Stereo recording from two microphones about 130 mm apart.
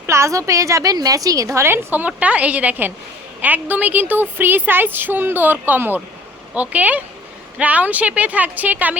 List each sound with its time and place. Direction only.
0.1 s a woman's voice: 25° right (ahead or behind)